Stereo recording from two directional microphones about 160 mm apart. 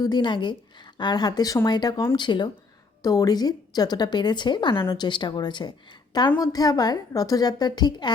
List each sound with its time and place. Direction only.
0.0 s a woman's voice: 25° left (ahead or behind)